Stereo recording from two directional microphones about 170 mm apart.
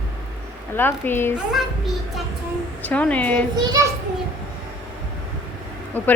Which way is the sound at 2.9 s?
10° left (ahead or behind).